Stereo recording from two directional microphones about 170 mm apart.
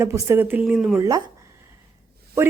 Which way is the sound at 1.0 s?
20° right (ahead or behind).